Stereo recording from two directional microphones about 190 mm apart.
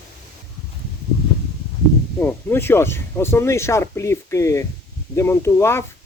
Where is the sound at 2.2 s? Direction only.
10° left (ahead or behind).